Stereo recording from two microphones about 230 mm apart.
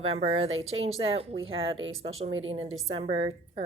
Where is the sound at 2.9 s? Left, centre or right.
Right.